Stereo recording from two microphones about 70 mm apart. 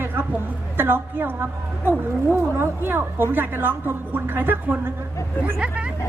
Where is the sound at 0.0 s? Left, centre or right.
Right.